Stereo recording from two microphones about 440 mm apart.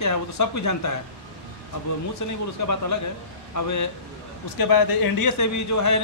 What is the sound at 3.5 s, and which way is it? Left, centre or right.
Speech, left.